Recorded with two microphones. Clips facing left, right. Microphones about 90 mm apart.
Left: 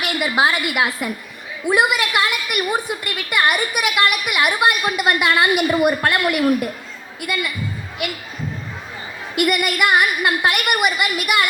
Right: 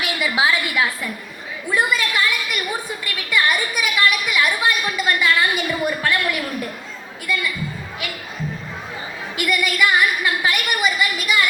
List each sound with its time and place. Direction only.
0.0 s a woman's voice: 55° left (ahead or behind)
9.3 s a woman's voice: 60° left (ahead or behind)